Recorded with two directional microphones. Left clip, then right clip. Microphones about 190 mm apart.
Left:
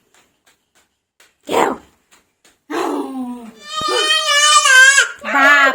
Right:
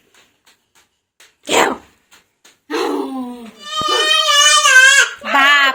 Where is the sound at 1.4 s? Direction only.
10° left (ahead or behind).